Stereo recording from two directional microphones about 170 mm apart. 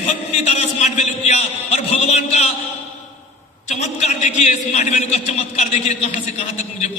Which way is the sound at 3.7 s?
40° left (ahead or behind).